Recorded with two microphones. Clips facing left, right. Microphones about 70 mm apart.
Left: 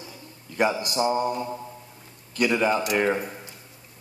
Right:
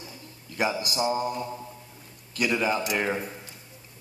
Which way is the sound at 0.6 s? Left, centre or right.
Centre.